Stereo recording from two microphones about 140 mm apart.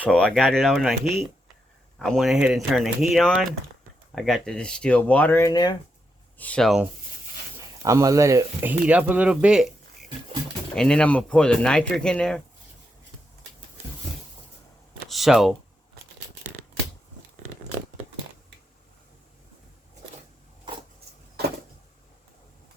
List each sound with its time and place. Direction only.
0.0 s speech: 5° left (ahead or behind)
5.5 s speech: 30° left (ahead or behind)
6.3 s speech: 10° left (ahead or behind)
7.8 s speech: 20° right (ahead or behind)
8.9 s speech: 10° right (ahead or behind)
10.8 s speech: 5° left (ahead or behind)
15.1 s speech: centre (ahead or behind)